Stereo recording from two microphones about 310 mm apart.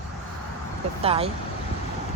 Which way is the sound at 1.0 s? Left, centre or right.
Centre.